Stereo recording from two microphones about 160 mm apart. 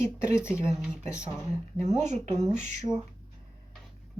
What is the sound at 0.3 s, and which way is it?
Speech, 15° left (ahead or behind).